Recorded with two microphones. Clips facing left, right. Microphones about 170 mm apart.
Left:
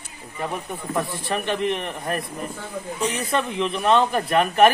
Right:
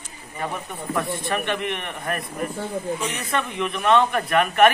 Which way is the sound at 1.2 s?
30° left (ahead or behind).